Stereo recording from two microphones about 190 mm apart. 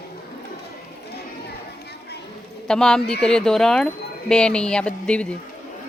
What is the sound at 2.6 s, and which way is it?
Speech, 5° left (ahead or behind).